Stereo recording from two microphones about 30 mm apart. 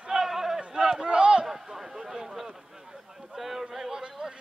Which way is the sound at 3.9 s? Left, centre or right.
Right.